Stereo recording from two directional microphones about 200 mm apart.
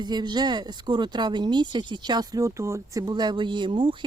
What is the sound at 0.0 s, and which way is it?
Speech, 20° right (ahead or behind).